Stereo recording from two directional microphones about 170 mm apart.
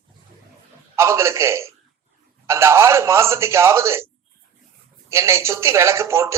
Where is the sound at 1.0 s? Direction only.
15° right (ahead or behind).